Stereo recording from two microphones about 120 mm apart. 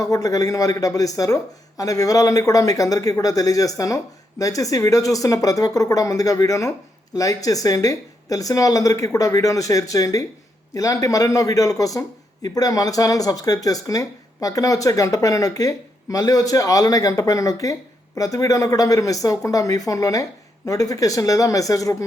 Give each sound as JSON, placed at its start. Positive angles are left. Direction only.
{"t": 0.0, "sound": "speech", "side_deg": 30}